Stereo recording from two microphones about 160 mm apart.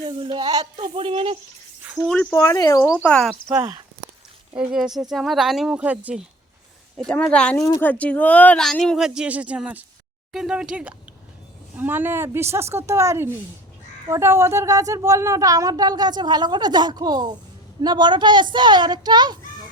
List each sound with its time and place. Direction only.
0.0 s speech: 30° right (ahead or behind)
2.3 s speech: 20° left (ahead or behind)
3.0 s speech: 5° left (ahead or behind)
4.7 s speech: centre (ahead or behind)
6.9 s speech: 5° left (ahead or behind)
7.6 s a woman's voice: 15° left (ahead or behind); by 19.4 s 25° right (ahead or behind)